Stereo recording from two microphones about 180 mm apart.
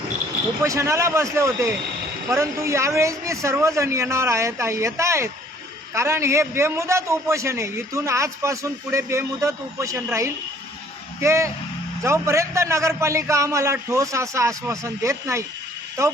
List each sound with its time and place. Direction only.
0.6 s a man's voice: 15° right (ahead or behind)